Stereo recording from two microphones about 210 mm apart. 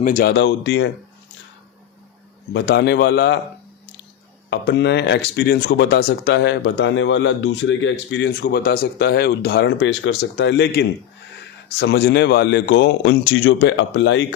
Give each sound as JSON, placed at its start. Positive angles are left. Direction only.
{"t": 0.0, "sound": "speech", "side_deg": 40}
{"t": 2.5, "sound": "a man's voice", "side_deg": 55}
{"t": 4.4, "sound": "speech", "side_deg": 55}